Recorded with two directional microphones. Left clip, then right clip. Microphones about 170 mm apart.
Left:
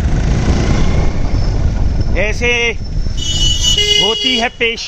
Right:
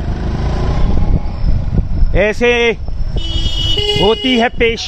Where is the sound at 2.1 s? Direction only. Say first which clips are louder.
Right 3 dB; 75° right (ahead or behind).